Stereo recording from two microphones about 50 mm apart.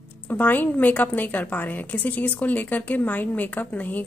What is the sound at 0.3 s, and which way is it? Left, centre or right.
A woman's voice, left.